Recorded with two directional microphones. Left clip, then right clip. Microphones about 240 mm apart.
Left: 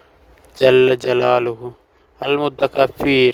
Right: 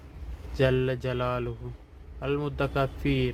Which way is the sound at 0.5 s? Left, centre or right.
Left.